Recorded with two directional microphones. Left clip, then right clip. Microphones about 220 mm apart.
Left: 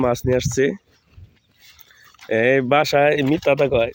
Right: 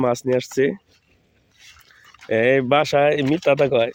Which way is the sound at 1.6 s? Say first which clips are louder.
Right 1 dB; centre (ahead or behind).